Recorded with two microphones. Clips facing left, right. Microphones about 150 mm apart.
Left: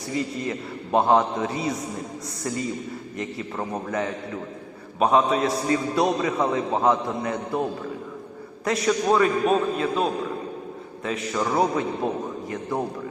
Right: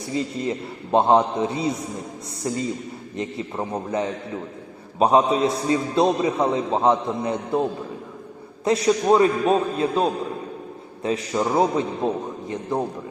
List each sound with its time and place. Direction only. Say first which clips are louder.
0.1 s a man's voice: right 2 dB; 25° right (ahead or behind)